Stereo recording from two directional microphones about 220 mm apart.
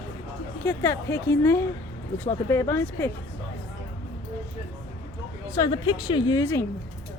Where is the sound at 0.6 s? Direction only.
10° left (ahead or behind).